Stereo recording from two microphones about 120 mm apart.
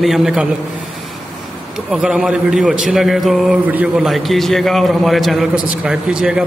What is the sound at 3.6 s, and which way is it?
A man's voice, 10° right (ahead or behind).